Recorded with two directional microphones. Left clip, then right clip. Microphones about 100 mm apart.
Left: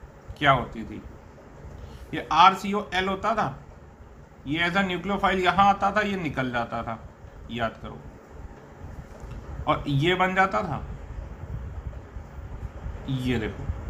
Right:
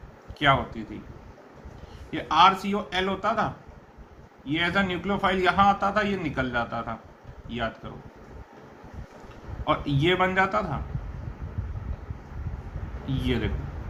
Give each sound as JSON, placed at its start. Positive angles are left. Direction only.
{"t": 0.3, "sound": "speech", "side_deg": 40}
{"t": 2.0, "sound": "a man's voice", "side_deg": 40}
{"t": 9.6, "sound": "a man's voice", "side_deg": 35}
{"t": 13.1, "sound": "a man's voice", "side_deg": 30}